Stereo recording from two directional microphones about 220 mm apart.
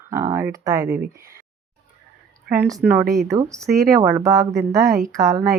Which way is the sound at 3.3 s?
15° right (ahead or behind).